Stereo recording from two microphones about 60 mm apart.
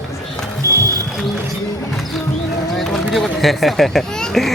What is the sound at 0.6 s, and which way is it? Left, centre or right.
Music, right.